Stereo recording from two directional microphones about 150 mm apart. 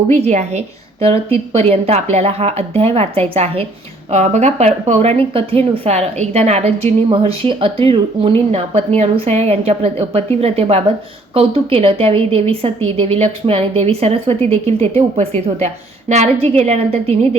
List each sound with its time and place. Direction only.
0.1 s a woman's voice: 50° right (ahead or behind)